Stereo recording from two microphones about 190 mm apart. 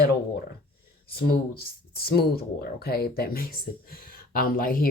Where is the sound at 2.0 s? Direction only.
55° left (ahead or behind).